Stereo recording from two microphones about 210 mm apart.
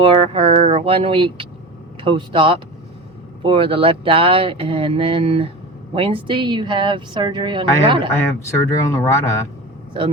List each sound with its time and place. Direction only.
0.0 s speech: 25° right (ahead or behind)
8.1 s speech: 15° left (ahead or behind)